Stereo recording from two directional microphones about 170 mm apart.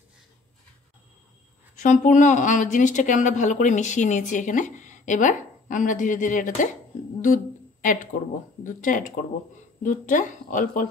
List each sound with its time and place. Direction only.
1.8 s speech: 45° left (ahead or behind)
7.8 s speech: 50° left (ahead or behind)